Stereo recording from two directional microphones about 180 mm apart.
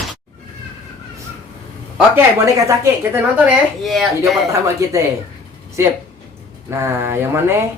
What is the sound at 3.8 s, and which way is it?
Speech, centre (ahead or behind).